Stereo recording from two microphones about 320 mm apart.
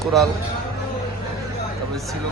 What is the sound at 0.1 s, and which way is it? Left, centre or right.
Speech, centre.